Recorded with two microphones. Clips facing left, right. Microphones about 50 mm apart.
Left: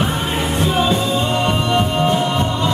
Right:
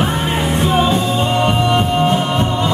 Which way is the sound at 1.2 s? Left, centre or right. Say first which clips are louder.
Right 3 dB; centre.